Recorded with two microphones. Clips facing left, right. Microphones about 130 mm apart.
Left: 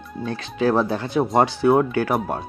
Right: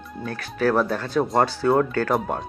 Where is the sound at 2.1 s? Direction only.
Centre (ahead or behind).